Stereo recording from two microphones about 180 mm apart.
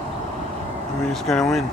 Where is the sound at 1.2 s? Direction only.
Centre (ahead or behind).